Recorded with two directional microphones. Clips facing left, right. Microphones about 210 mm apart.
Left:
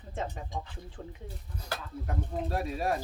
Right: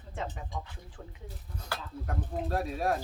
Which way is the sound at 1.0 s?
35° left (ahead or behind).